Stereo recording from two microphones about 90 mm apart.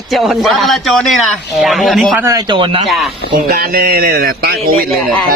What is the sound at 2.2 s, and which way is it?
Speech, 40° right (ahead or behind).